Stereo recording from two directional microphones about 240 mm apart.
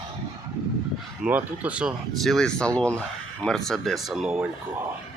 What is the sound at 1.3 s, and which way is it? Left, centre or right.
Speech, centre.